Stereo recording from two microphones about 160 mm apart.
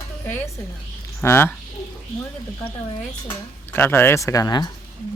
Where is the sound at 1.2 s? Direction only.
15° left (ahead or behind).